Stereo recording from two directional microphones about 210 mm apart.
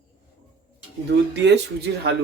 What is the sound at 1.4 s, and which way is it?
Speech, 55° right (ahead or behind).